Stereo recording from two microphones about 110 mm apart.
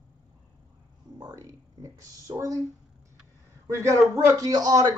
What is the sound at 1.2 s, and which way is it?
A man's voice, 35° right (ahead or behind).